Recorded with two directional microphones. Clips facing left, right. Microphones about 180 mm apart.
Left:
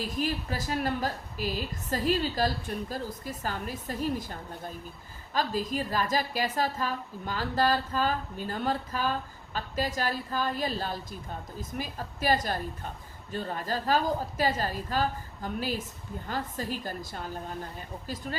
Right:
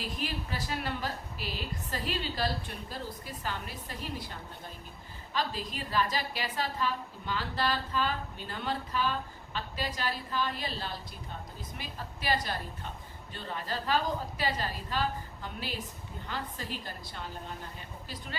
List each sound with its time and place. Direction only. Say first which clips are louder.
0.2 s a woman's voice: left 8 dB; 45° left (ahead or behind)